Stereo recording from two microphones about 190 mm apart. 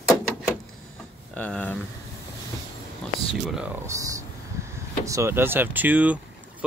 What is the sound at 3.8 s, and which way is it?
Speech, 15° right (ahead or behind).